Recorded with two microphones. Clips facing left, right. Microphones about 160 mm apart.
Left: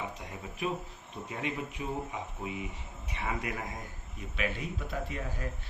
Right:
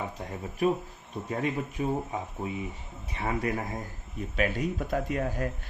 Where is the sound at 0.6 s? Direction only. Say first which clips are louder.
Right 8 dB; 40° right (ahead or behind).